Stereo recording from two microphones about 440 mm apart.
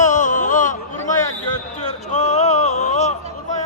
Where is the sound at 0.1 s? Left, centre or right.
Centre.